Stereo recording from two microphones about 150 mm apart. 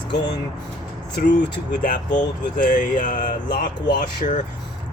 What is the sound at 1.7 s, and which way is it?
Speech, 60° left (ahead or behind).